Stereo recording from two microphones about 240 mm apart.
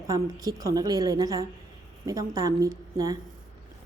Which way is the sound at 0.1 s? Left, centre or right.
Centre.